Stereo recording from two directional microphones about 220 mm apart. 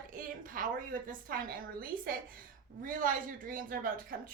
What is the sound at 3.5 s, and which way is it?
Speech, 40° right (ahead or behind).